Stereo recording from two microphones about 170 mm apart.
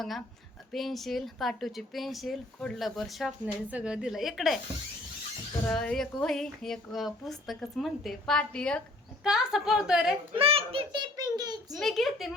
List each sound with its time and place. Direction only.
0.7 s speech: centre (ahead or behind)
5.6 s speech: 5° left (ahead or behind)
10.3 s a child's voice: 35° right (ahead or behind)
11.8 s speech: centre (ahead or behind)